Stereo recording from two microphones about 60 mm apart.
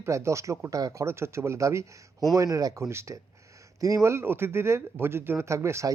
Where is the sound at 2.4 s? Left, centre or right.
Right.